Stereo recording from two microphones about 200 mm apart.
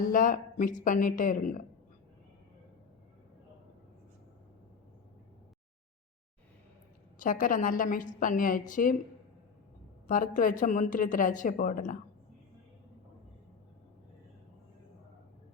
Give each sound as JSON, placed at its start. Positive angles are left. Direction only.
{"t": 0.1, "sound": "a woman's voice", "side_deg": 40}
{"t": 7.2, "sound": "a woman's voice", "side_deg": 40}
{"t": 10.1, "sound": "a woman's voice", "side_deg": 40}